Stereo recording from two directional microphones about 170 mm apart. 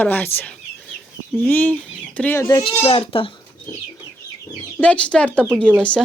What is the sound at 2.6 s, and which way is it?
Speech, 30° left (ahead or behind).